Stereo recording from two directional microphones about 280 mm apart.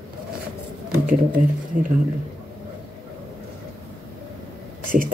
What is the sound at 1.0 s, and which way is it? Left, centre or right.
Speech, right.